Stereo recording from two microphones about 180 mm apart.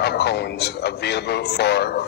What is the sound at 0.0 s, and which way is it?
A man's voice, 65° left (ahead or behind).